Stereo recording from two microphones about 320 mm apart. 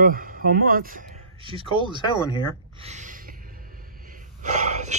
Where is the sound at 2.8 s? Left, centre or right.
Right.